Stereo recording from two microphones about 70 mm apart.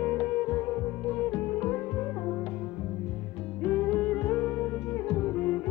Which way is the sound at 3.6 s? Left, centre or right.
Centre.